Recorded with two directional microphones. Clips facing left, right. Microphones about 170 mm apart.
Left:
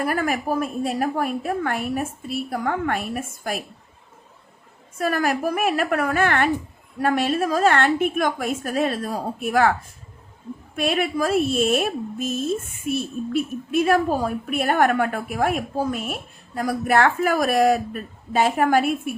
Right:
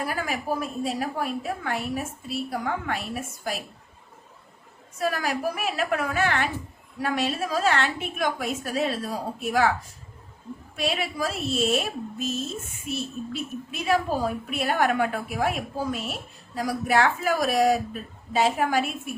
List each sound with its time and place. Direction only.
0.0 s a woman's voice: 55° left (ahead or behind)
4.9 s a woman's voice: 55° left (ahead or behind)
10.8 s a woman's voice: 55° left (ahead or behind)